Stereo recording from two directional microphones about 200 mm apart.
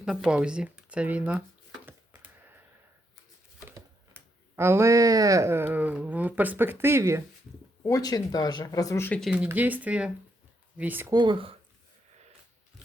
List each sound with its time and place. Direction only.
0.0 s speech: 5° right (ahead or behind)
3.7 s speech: 10° right (ahead or behind)
7.9 s speech: 20° left (ahead or behind)
9.3 s speech: 5° right (ahead or behind); by 11.5 s 25° right (ahead or behind)